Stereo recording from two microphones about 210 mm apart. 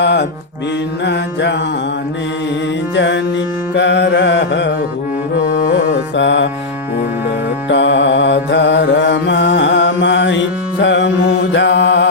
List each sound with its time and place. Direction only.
0.0 s music: 55° left (ahead or behind)
2.9 s music: 60° left (ahead or behind)
3.8 s carnatic music: 55° left (ahead or behind)
5.5 s music: 60° left (ahead or behind)
7.7 s mantra: 60° left (ahead or behind)